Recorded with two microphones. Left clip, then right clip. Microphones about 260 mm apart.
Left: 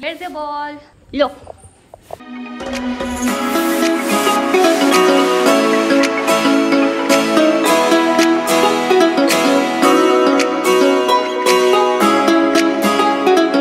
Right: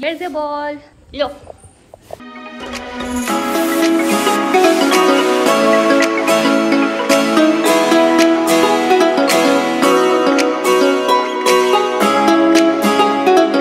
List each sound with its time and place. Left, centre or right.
0.0 s speech: centre
1.2 s speech: left
2.7 s music: centre